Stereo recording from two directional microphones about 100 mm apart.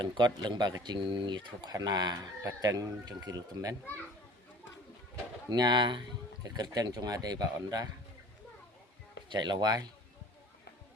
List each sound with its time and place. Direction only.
0.0 s speech: 50° right (ahead or behind)
5.5 s speech: 45° right (ahead or behind)
9.3 s speech: 45° right (ahead or behind)